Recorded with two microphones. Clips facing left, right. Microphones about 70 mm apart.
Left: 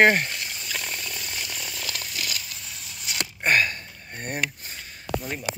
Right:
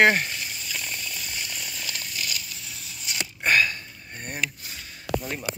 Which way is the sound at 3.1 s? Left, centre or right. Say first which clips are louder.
Even; left.